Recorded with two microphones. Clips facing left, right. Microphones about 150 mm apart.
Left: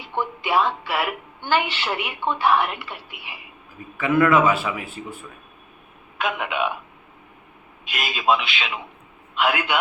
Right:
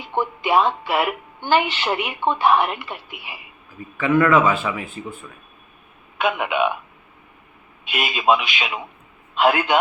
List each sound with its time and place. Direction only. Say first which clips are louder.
0.2 s speech: right 3 dB; 20° right (ahead or behind)
3.9 s a man's voice: right 1 dB; 10° left (ahead or behind)
6.1 s speech: right 4 dB; 5° right (ahead or behind)
8.1 s speech: right 2 dB; 10° right (ahead or behind)
9.3 s a man's voice: right 4 dB; 35° right (ahead or behind)